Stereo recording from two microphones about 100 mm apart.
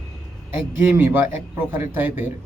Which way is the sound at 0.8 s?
20° right (ahead or behind).